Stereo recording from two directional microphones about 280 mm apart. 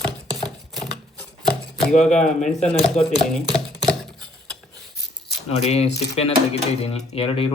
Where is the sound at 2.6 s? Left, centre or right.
Centre.